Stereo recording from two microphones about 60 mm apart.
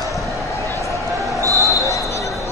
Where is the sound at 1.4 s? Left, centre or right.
Right.